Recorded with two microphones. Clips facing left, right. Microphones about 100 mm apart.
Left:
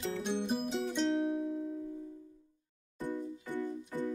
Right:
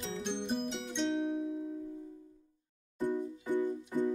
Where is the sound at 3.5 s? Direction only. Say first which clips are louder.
Right 7 dB; 15° right (ahead or behind).